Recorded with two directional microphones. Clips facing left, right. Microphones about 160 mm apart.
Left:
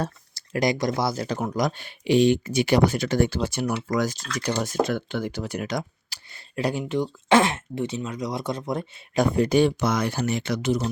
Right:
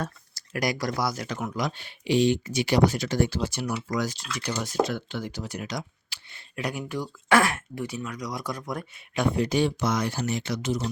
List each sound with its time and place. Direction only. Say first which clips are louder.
0.0 s speech: left 4 dB; 25° left (ahead or behind); by 5.8 s 55° left (ahead or behind)
6.1 s speech: left 1 dB; 35° left (ahead or behind)
9.1 s speech: left 4 dB; 45° left (ahead or behind); by 10.8 s 60° left (ahead or behind)